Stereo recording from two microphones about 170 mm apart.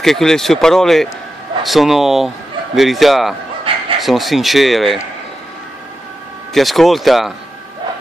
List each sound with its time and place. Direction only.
0.0 s speech: centre (ahead or behind)
3.7 s a sound: 30° right (ahead or behind)
4.0 s speech: centre (ahead or behind)
6.5 s speech: centre (ahead or behind)